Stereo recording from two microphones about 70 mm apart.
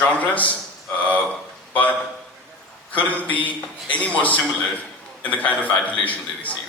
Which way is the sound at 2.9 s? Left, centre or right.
Left.